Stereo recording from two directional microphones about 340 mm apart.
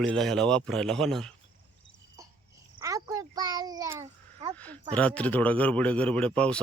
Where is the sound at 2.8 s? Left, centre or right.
Centre.